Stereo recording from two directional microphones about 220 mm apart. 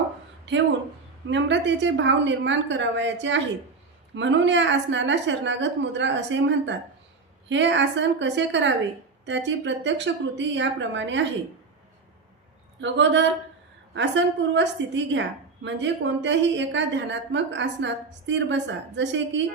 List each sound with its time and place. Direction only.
1.3 s a woman's voice: 55° right (ahead or behind)
12.8 s a woman's voice: 55° right (ahead or behind)